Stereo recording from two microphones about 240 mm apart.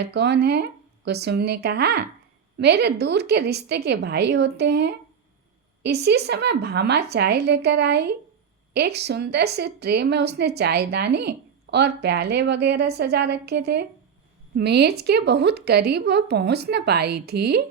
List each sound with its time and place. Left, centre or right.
0.0 s a woman's voice: right